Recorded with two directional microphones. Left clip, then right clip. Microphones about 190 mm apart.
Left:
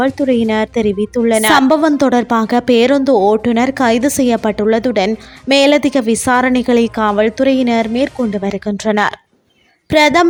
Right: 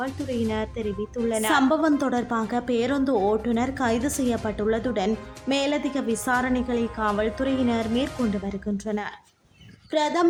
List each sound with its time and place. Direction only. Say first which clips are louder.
0.0 s speech: left 14 dB; 50° left (ahead or behind)